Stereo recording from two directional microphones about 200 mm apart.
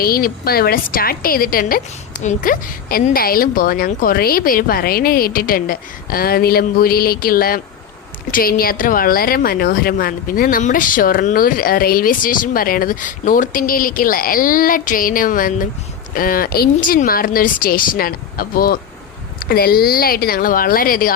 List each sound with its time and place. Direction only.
0.0 s a woman's voice: 50° left (ahead or behind)